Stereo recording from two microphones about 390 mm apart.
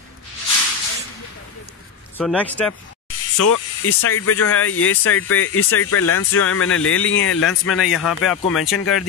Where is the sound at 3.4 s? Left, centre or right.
Left.